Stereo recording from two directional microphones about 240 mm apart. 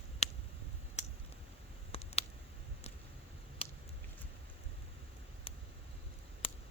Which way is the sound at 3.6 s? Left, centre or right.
Left.